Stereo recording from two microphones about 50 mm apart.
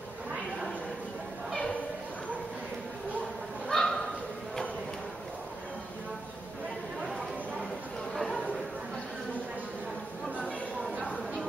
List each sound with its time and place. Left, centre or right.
3.6 s bow-wow: centre